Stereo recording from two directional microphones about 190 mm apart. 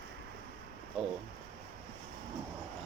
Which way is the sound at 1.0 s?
Centre (ahead or behind).